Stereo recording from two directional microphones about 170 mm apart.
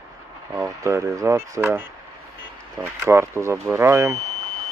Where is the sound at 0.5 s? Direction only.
20° right (ahead or behind).